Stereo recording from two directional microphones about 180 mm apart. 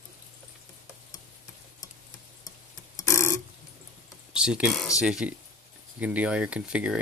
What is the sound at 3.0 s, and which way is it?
Burping, 15° left (ahead or behind).